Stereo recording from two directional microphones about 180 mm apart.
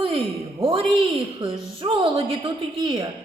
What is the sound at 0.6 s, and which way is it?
A woman's voice, 30° right (ahead or behind).